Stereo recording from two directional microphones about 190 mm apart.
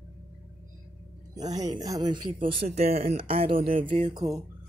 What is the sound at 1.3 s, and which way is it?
Speech, 20° right (ahead or behind).